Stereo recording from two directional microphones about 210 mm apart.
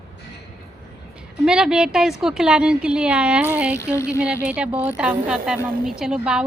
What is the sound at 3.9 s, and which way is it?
Speech, 15° left (ahead or behind).